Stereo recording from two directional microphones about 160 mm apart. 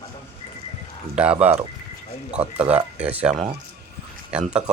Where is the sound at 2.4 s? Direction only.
40° right (ahead or behind).